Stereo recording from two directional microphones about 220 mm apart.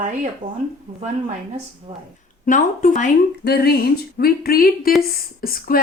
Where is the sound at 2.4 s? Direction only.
35° left (ahead or behind).